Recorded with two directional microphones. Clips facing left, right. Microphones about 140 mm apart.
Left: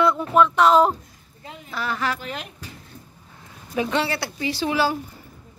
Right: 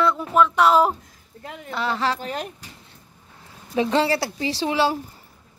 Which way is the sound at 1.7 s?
25° right (ahead or behind).